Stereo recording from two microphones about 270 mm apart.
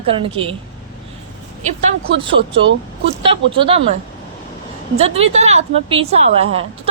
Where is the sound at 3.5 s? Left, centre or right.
Centre.